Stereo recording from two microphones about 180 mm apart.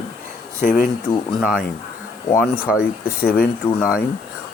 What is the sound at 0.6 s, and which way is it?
Speech, 50° left (ahead or behind).